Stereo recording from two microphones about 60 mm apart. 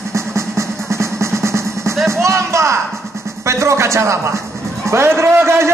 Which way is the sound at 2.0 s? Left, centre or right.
Right.